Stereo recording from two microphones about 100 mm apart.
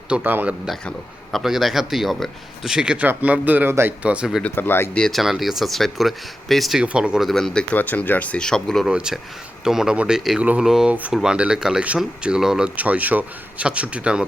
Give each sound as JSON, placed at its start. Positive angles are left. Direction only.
{"t": 0.1, "sound": "speech", "side_deg": -20}
{"t": 0.9, "sound": "speech", "side_deg": 0}
{"t": 4.0, "sound": "speech", "side_deg": -10}
{"t": 4.4, "sound": "speech", "side_deg": 20}
{"t": 4.9, "sound": "speech", "side_deg": 5}
{"t": 5.2, "sound": "speech", "side_deg": -5}
{"t": 7.7, "sound": "speech", "side_deg": 15}
{"t": 8.9, "sound": "speech", "side_deg": -10}